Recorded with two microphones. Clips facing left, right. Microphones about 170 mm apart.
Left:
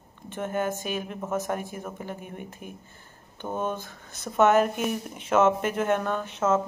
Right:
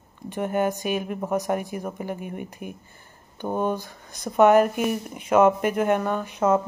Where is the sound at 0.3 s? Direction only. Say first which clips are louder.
Right 4 dB; 15° right (ahead or behind).